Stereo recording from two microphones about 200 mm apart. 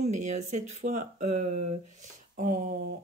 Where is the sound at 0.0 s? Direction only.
35° right (ahead or behind).